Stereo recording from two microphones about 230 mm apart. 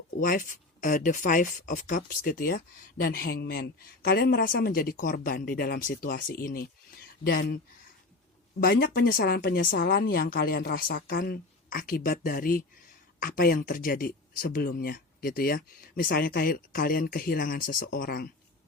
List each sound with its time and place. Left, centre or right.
0.2 s speech: left
8.6 s speech: left